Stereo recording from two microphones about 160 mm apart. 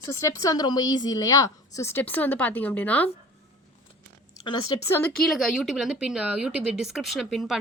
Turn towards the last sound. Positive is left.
turn(degrees=0)  # may be behind; listen again after turning